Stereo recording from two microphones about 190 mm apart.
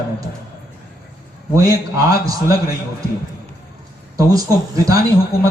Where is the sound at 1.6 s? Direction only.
20° right (ahead or behind).